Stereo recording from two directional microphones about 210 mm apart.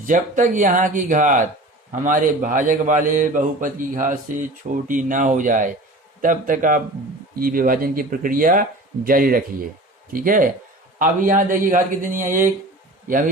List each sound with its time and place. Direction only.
0.0 s a man's voice: 40° right (ahead or behind)